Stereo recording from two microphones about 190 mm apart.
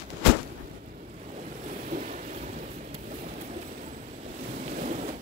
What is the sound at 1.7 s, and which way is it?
Thunder, 40° right (ahead or behind).